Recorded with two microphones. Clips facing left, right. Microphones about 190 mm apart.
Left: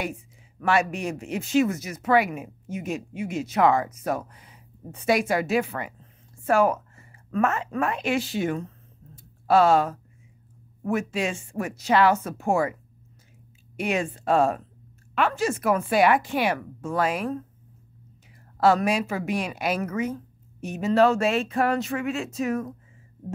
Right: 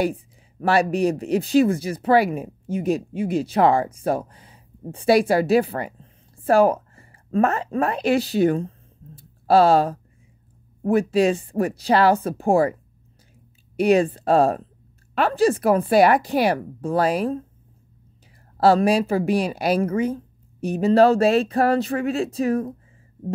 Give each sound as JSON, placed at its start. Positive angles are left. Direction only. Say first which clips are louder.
{"t": 0.0, "sound": "a woman's voice", "louder": "right 9 dB", "side_deg": -35}
{"t": 13.7, "sound": "a woman's voice", "louder": "right 9 dB", "side_deg": -35}
{"t": 18.6, "sound": "a woman's voice", "louder": "right 4 dB", "side_deg": -30}